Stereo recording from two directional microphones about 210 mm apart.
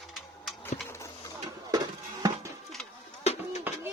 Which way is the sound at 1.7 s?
15° right (ahead or behind).